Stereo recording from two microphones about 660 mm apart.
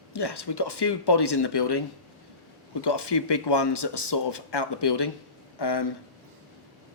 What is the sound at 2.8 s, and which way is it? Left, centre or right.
Speech, left.